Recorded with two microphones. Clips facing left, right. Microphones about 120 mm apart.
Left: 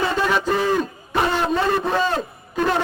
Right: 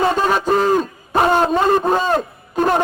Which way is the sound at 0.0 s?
40° right (ahead or behind).